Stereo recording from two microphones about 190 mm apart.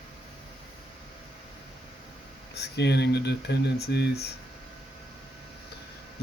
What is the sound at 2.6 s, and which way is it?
Speech, 65° left (ahead or behind).